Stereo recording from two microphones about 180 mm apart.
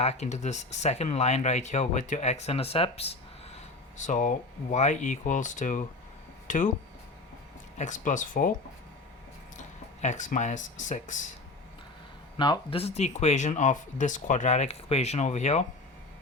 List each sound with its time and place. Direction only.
0.0 s speech: 40° left (ahead or behind)
3.9 s speech: 45° left (ahead or behind)
7.8 s speech: 45° left (ahead or behind)
9.6 s speech: 40° left (ahead or behind)
12.4 s speech: 30° left (ahead or behind)